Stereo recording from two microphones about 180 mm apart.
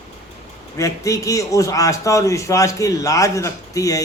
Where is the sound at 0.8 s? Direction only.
15° left (ahead or behind).